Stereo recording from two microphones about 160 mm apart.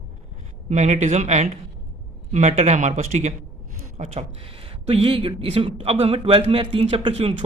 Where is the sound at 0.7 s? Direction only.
45° right (ahead or behind).